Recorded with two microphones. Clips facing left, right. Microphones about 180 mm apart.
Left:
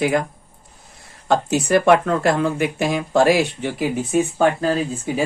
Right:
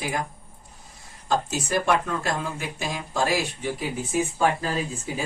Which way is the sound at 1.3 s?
65° left (ahead or behind).